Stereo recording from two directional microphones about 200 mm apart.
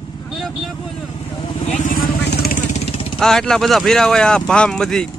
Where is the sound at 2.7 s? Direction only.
30° left (ahead or behind).